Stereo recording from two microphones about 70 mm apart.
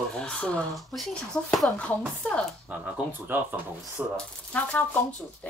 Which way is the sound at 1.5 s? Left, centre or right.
Centre.